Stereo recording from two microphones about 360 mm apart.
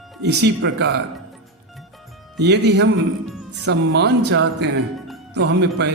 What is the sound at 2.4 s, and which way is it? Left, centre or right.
A man's voice, right.